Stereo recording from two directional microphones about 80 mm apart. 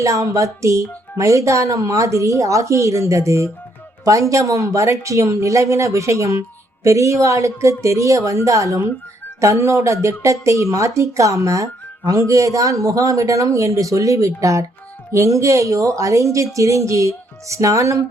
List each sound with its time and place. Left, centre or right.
0.0 s speech: right